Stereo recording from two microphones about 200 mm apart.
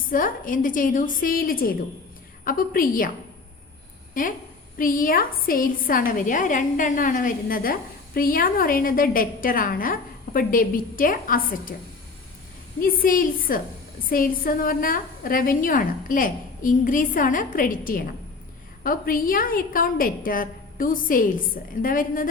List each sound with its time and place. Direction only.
0.0 s a woman's voice: 45° left (ahead or behind)
4.2 s a woman's voice: 40° left (ahead or behind)
12.8 s a woman's voice: 45° left (ahead or behind)